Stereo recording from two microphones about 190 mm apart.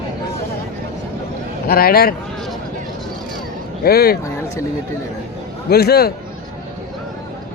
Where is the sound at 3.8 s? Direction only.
55° left (ahead or behind).